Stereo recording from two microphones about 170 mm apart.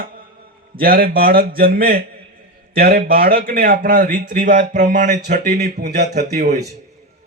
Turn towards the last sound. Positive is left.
turn(degrees=-45)  # may be behind; listen again after turning